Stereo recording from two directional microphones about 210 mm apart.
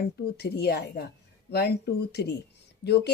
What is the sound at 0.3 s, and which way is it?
Speech, 50° left (ahead or behind).